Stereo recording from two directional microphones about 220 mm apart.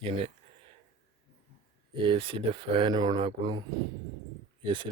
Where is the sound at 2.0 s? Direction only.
25° right (ahead or behind).